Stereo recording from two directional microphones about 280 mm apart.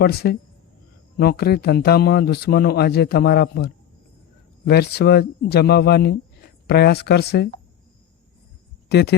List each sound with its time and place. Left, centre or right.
0.0 s a man's voice: left
8.9 s speech: left